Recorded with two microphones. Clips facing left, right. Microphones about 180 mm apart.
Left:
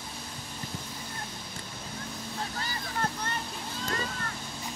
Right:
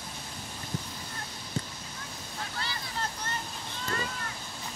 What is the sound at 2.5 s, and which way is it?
Vehicle, 50° left (ahead or behind).